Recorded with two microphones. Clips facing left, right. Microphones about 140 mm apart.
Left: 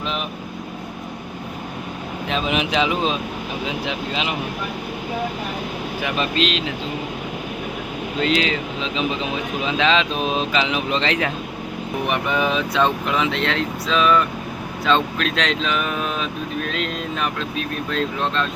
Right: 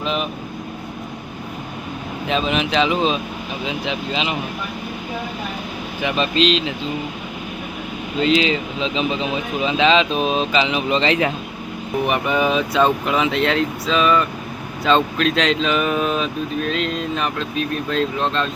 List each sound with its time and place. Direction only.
0.0 s vehicle: centre (ahead or behind)
2.5 s speech: 10° left (ahead or behind)
6.1 s speech: 5° left (ahead or behind)
8.2 s speech: centre (ahead or behind)